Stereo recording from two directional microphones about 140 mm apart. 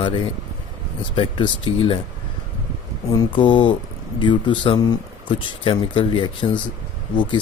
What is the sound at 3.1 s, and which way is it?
Speech, 30° left (ahead or behind).